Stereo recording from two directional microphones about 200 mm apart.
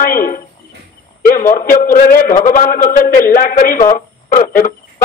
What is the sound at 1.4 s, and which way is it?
A man's voice, 45° left (ahead or behind).